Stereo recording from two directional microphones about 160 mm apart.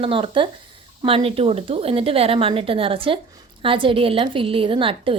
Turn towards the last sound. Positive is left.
turn(degrees=-35)  # may be behind; listen again after turning